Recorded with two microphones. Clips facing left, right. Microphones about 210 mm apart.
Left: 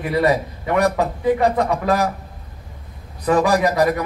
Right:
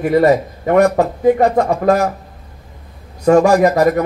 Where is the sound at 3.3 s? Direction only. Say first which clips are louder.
Right 7 dB; 45° right (ahead or behind).